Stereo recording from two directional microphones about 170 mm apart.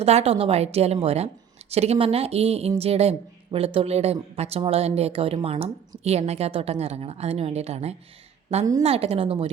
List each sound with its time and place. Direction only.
0.0 s speech: 40° right (ahead or behind)